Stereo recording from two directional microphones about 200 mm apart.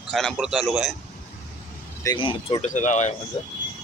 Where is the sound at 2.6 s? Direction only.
40° left (ahead or behind).